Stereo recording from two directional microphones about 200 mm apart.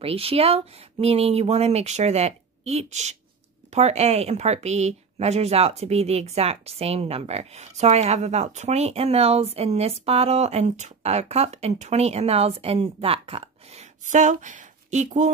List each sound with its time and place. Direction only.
0.0 s speech: 30° right (ahead or behind)